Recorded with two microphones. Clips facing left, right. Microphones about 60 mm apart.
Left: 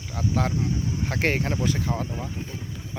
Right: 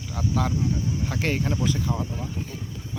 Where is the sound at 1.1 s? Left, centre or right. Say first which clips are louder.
Left 3 dB; left.